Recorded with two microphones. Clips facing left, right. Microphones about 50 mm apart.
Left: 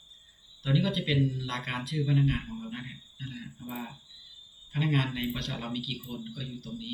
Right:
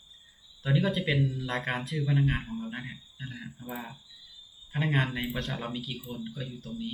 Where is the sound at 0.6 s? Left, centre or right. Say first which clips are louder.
Right 1 dB; right.